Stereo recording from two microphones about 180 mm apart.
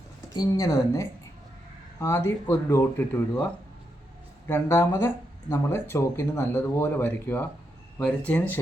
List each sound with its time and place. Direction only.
0.3 s a woman's voice: 20° left (ahead or behind)